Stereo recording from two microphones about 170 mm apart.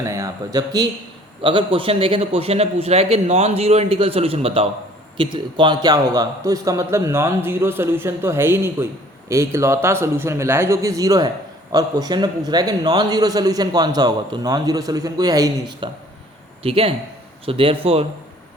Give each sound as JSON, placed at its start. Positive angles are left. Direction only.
{"t": 0.0, "sound": "a man's voice", "side_deg": -20}
{"t": 16.6, "sound": "a man's voice", "side_deg": -35}